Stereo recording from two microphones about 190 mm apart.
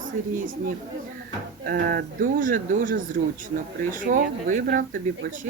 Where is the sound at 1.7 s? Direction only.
50° right (ahead or behind).